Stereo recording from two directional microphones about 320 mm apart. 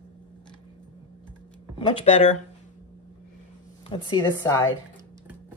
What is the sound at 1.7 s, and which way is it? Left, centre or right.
Speech, centre.